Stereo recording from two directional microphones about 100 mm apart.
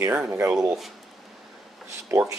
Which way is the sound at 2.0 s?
30° right (ahead or behind).